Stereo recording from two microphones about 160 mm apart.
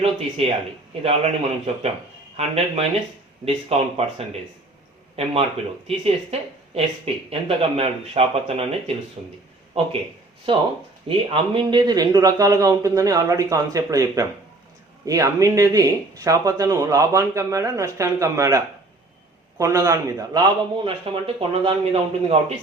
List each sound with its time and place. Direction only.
0.0 s speech: 40° right (ahead or behind)
6.7 s speech: 40° right (ahead or behind)
10.5 s speech: 30° right (ahead or behind)